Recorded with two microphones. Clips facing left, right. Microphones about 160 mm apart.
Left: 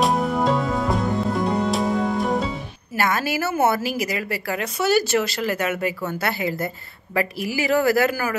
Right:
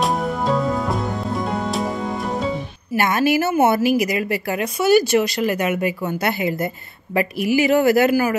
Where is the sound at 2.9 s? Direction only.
20° right (ahead or behind).